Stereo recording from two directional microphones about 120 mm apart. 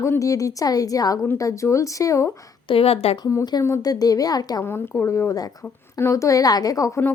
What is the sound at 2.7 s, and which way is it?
Speech, 55° left (ahead or behind).